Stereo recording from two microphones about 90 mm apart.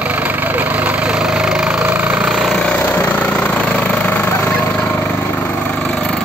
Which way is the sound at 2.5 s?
10° left (ahead or behind).